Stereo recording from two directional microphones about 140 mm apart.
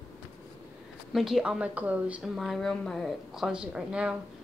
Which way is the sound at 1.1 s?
Centre (ahead or behind).